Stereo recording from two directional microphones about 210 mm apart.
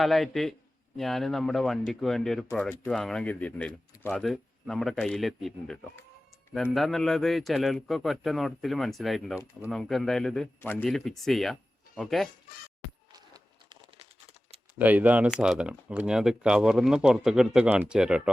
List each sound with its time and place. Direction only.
0.0 s speech: centre (ahead or behind)
13.1 s a sound: 20° right (ahead or behind)
14.8 s speech: 5° right (ahead or behind)